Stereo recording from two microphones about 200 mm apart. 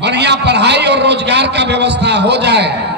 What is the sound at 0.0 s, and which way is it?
A man's voice, 60° right (ahead or behind).